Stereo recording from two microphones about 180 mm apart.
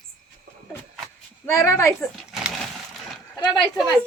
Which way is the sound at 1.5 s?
15° left (ahead or behind).